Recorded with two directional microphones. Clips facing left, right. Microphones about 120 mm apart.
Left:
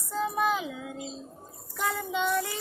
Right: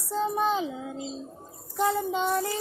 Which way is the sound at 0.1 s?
30° right (ahead or behind).